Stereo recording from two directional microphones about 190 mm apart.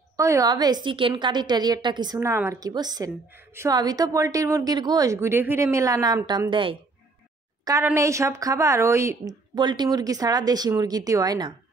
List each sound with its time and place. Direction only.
0.2 s a woman's voice: 15° right (ahead or behind)
7.6 s a woman's voice: 15° right (ahead or behind)